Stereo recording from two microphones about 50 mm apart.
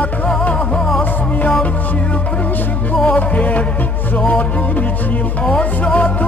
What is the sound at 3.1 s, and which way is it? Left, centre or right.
Music, left.